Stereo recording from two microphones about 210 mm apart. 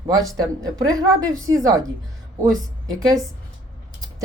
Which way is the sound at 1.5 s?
15° right (ahead or behind).